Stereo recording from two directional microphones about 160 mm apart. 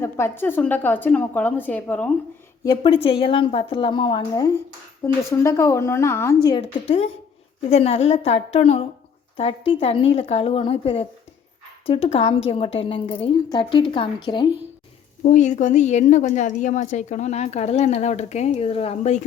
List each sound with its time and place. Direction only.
0.0 s a woman's voice: 15° left (ahead or behind)
2.6 s a woman's voice: 35° left (ahead or behind)
5.0 s a woman's voice: 15° left (ahead or behind)
6.6 s a woman's voice: 35° left (ahead or behind)
15.2 s a woman's voice: 50° left (ahead or behind)